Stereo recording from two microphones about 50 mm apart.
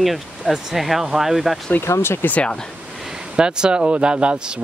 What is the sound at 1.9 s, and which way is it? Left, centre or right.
Speech, left.